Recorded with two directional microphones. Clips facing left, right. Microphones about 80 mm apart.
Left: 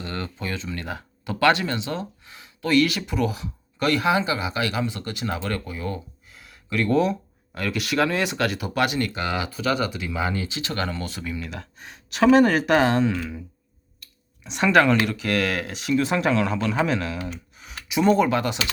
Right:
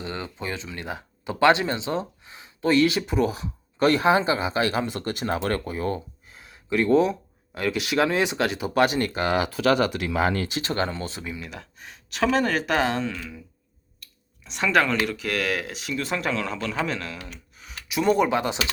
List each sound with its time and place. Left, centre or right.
0.0 s speech: centre; by 9.5 s right
9.5 s speech: right
10.6 s speech: right
11.5 s speech: centre
18.2 s speech: centre